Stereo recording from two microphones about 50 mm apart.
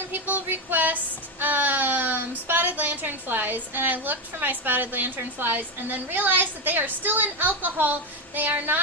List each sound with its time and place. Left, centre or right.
0.1 s child singing: right
8.4 s a woman's voice: right